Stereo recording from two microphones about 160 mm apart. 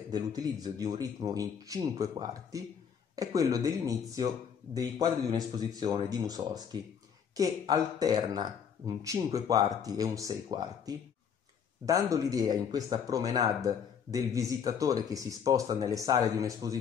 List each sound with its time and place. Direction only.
0.1 s speech: 25° right (ahead or behind)